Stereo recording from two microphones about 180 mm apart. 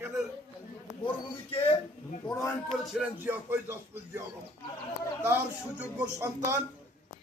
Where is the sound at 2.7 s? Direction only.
Centre (ahead or behind).